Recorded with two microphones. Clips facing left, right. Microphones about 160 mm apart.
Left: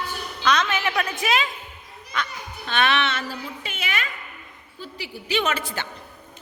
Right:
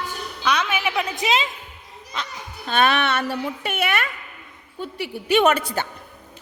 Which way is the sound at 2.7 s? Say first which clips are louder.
Right 3 dB; 45° right (ahead or behind).